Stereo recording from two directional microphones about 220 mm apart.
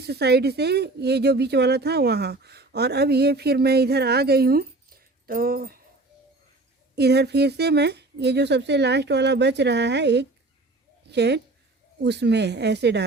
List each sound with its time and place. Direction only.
0.0 s speech: 45° right (ahead or behind)
6.9 s a woman's voice: 50° right (ahead or behind)